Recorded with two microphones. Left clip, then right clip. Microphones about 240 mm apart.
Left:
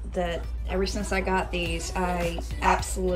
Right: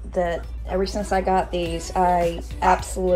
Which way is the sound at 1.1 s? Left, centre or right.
Centre.